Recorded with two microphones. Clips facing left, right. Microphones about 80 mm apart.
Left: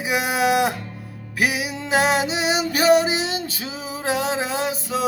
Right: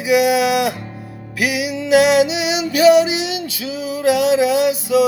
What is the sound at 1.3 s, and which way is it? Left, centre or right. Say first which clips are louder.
Music: right 3 dB; left.